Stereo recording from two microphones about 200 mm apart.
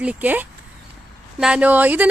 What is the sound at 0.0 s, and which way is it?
A woman's voice, 5° right (ahead or behind).